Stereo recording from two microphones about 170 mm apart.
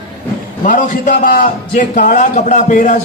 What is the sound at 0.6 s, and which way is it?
A man's voice, 50° left (ahead or behind).